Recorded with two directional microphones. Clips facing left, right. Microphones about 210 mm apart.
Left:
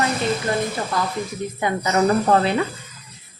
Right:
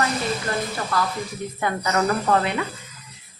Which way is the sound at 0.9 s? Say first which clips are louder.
Left 1 dB; 20° left (ahead or behind).